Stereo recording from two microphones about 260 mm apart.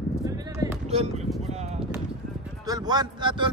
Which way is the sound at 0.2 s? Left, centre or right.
Centre.